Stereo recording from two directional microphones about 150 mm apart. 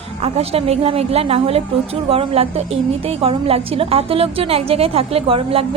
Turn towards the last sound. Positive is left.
turn(degrees=-40)  # may be behind; listen again after turning